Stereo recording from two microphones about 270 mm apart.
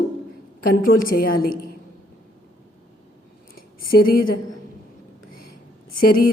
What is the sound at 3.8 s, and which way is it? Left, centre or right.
Speech, left.